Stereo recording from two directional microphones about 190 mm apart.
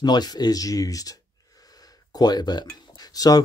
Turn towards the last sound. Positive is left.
turn(degrees=20)  # may be behind; listen again after turning